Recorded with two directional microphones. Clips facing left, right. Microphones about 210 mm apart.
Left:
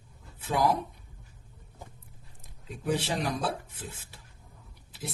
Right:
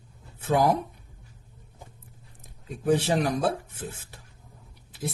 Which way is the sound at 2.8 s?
50° right (ahead or behind).